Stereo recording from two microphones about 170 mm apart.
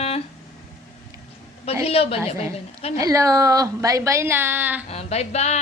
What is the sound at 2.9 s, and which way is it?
A woman's voice, 20° right (ahead or behind).